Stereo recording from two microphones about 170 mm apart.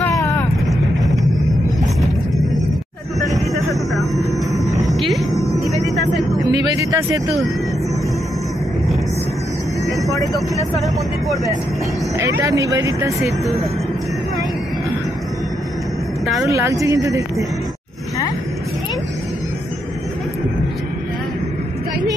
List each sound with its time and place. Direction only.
0.0 s vehicle: 15° left (ahead or behind)
3.3 s vehicle: centre (ahead or behind)
4.8 s music: centre (ahead or behind)
5.8 s vehicle: centre (ahead or behind)
6.9 s speech: 20° right (ahead or behind)
10.1 s speech: 20° left (ahead or behind)
12.2 s speech: 20° right (ahead or behind)
16.4 s speech: 20° right (ahead or behind)